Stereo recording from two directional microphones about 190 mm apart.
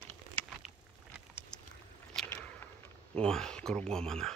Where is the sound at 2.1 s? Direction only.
10° left (ahead or behind).